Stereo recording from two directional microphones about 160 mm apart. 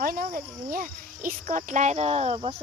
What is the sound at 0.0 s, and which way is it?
Speech, 60° right (ahead or behind).